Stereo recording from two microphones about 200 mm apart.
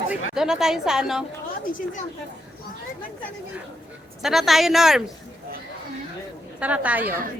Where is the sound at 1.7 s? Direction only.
40° left (ahead or behind).